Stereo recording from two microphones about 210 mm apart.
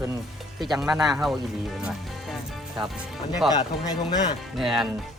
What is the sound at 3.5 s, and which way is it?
Speech, 20° left (ahead or behind).